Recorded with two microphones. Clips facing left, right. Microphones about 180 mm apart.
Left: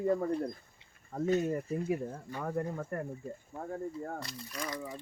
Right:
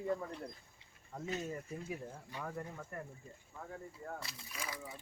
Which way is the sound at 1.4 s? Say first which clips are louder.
Left 10 dB; 55° left (ahead or behind).